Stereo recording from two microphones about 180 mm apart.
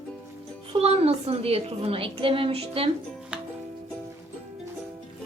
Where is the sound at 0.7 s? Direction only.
35° right (ahead or behind).